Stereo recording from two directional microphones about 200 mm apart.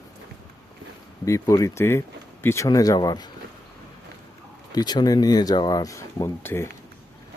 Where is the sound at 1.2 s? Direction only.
15° left (ahead or behind).